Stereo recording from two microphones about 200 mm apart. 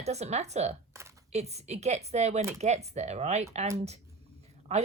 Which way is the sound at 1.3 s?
35° right (ahead or behind).